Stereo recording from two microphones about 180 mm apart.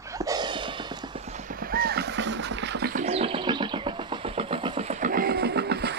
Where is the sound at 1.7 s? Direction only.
55° right (ahead or behind).